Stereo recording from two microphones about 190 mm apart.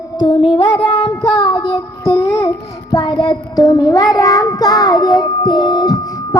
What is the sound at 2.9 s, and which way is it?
Child singing, 20° left (ahead or behind).